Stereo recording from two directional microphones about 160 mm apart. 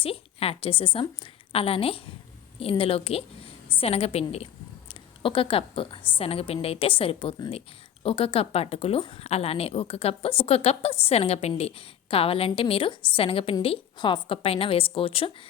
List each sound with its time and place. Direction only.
0.0 s a woman's voice: 35° left (ahead or behind)